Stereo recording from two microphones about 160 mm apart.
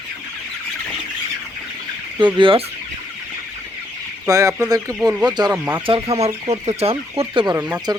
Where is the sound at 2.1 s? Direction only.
30° right (ahead or behind).